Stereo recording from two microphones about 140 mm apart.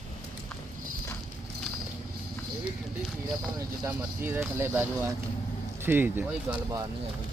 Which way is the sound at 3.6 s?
15° right (ahead or behind).